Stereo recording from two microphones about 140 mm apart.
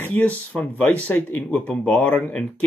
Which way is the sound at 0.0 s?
10° left (ahead or behind).